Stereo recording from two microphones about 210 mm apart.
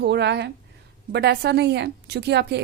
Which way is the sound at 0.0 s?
55° right (ahead or behind).